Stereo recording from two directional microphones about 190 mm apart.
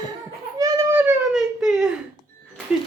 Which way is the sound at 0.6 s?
15° right (ahead or behind).